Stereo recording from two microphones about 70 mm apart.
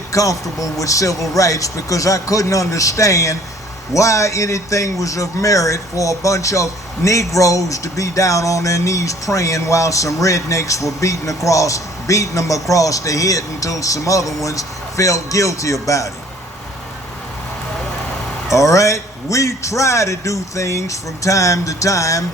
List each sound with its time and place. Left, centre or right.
0.1 s a man's voice: left
18.5 s a man's voice: left